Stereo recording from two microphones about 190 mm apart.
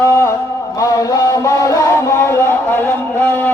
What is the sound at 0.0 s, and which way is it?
Music, 15° left (ahead or behind).